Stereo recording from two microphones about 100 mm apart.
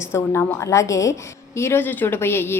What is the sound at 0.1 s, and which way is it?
A woman's voice, 30° left (ahead or behind).